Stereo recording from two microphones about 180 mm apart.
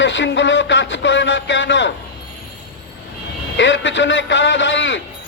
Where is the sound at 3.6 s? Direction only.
90° left.